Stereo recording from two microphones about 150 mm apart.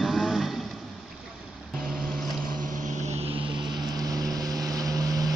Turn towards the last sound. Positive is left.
turn(degrees=-25)  # may be behind; listen again after turning